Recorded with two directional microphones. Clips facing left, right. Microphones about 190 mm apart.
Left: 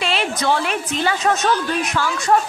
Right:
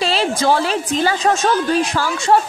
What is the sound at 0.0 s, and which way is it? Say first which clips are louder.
A woman's voice: right 4 dB; 35° right (ahead or behind).